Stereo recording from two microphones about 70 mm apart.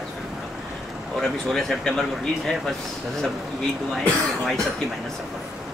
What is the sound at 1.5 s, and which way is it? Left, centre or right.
Speech, centre.